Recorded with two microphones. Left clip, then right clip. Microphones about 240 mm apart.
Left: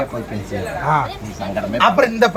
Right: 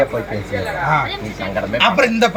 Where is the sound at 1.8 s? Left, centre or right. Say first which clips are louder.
Left 1 dB; centre.